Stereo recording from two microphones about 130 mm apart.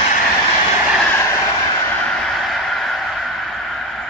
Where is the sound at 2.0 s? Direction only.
5° left (ahead or behind).